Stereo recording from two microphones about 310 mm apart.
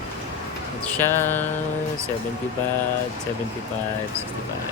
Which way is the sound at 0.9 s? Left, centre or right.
Centre.